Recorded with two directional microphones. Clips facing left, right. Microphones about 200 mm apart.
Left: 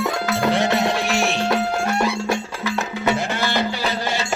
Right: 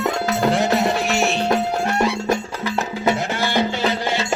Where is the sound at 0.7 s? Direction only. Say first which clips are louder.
Right 1 dB; centre (ahead or behind).